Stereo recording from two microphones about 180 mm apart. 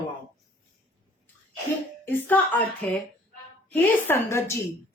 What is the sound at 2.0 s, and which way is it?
A woman's voice, 10° left (ahead or behind).